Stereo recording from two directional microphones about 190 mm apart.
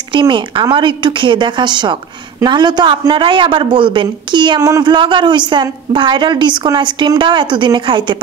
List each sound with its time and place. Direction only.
0.1 s a man's voice: 25° right (ahead or behind)